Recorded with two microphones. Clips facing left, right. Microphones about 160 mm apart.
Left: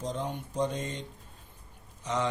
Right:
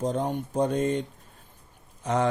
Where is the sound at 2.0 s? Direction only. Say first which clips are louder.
Right 6 dB; 55° right (ahead or behind).